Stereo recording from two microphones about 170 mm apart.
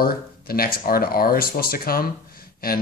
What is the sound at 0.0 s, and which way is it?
Speech, 60° left (ahead or behind).